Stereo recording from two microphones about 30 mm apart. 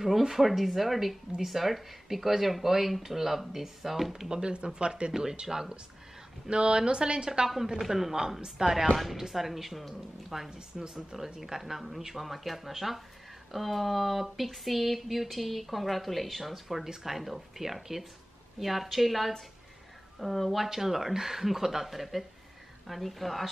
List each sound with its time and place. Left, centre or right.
0.4 s speech: centre
4.3 s speech: right
5.5 s speech: centre
6.5 s speech: right
7.4 s speech: centre